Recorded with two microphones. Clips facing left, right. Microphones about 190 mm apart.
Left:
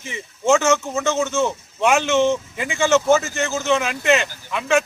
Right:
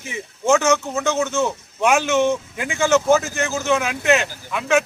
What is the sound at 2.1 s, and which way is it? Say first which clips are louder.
Speech: left 1 dB; 15° right (ahead or behind).